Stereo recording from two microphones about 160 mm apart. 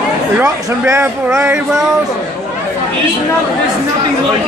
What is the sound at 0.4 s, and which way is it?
Speech, 20° right (ahead or behind).